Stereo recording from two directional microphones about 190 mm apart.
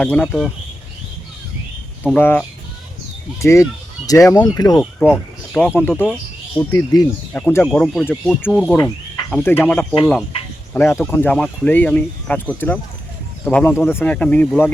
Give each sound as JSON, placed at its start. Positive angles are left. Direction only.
{"t": 0.0, "sound": "speech", "side_deg": 5}
{"t": 2.1, "sound": "speech", "side_deg": 10}
{"t": 4.8, "sound": "speech", "side_deg": 0}
{"t": 10.0, "sound": "speech", "side_deg": 0}
{"t": 10.8, "sound": "speech", "side_deg": 10}